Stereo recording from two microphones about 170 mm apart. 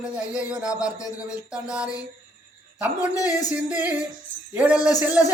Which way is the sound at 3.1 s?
20° left (ahead or behind).